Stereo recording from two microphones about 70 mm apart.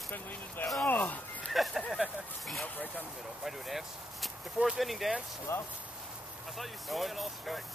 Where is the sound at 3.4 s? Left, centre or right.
Centre.